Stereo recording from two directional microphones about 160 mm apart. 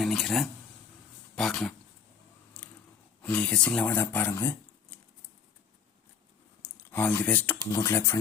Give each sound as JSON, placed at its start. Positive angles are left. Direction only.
{"t": 0.0, "sound": "a sound", "side_deg": 0}
{"t": 1.4, "sound": "speech", "side_deg": 5}
{"t": 2.5, "sound": "biting", "side_deg": 10}
{"t": 3.2, "sound": "speech", "side_deg": 10}
{"t": 6.6, "sound": "a sound", "side_deg": 10}
{"t": 7.7, "sound": "speech", "side_deg": 20}